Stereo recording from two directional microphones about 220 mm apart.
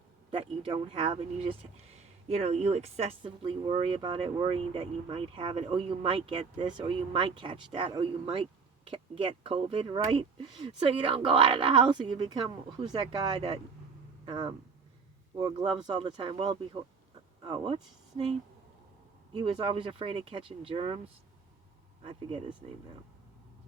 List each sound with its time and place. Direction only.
0.3 s speech: 25° right (ahead or behind)
19.3 s speech: 25° right (ahead or behind)
22.0 s speech: 25° right (ahead or behind)